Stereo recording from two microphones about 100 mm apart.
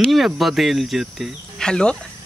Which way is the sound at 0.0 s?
Centre (ahead or behind).